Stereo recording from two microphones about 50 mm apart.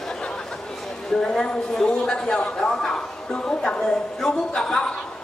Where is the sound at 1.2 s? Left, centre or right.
Centre.